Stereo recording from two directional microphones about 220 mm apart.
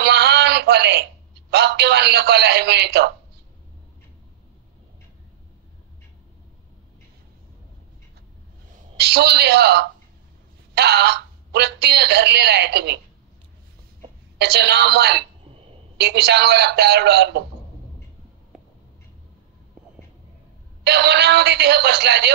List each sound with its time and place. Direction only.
0.0 s a sound: 50° right (ahead or behind)
1.5 s a woman's voice: 50° right (ahead or behind)
8.9 s a woman's voice: 50° right (ahead or behind)
14.4 s a woman's voice: 50° right (ahead or behind)
20.8 s a woman's voice: 50° right (ahead or behind)